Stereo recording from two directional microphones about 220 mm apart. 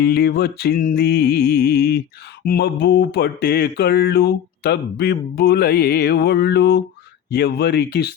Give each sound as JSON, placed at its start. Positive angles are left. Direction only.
{"t": 0.0, "sound": "mantra", "side_deg": 45}